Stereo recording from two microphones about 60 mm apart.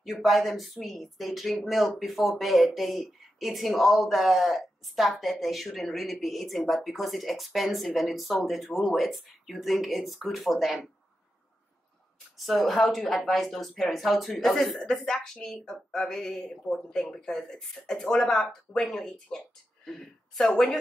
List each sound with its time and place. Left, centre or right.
0.0 s speech: centre
12.4 s speech: centre